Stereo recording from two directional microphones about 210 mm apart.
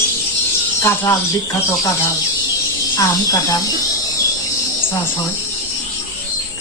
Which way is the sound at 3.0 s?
15° left (ahead or behind).